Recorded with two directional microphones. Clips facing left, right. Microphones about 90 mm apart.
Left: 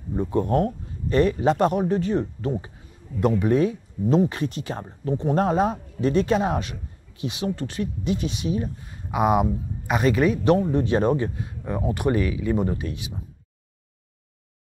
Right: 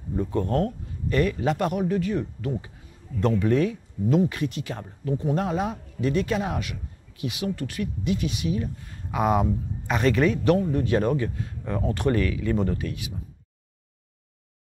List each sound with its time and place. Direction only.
0.1 s speech: 20° left (ahead or behind)
3.2 s speech: 15° left (ahead or behind)
10.4 s speech: 25° left (ahead or behind)